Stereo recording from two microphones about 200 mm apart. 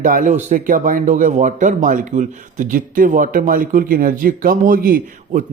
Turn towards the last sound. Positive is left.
turn(degrees=-45)  # may be behind; listen again after turning